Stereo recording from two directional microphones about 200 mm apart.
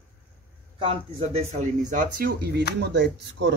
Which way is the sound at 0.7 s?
25° right (ahead or behind).